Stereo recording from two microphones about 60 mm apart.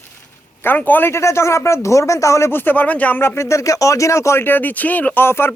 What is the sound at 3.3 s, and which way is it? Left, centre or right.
Speech, left.